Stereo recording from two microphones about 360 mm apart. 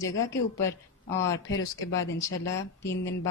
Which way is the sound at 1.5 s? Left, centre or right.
Left.